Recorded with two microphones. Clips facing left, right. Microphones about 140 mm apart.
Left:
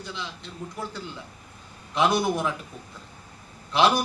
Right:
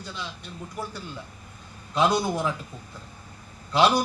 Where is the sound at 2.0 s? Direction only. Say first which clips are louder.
Even; 20° right (ahead or behind).